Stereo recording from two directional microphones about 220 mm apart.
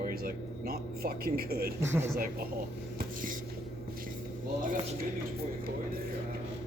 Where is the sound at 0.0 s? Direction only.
40° right (ahead or behind).